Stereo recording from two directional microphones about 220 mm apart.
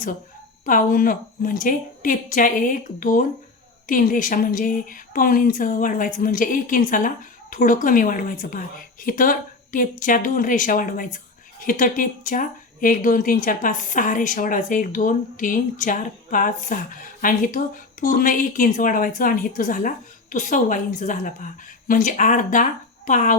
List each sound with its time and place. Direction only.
0.6 s a woman's voice: 40° left (ahead or behind)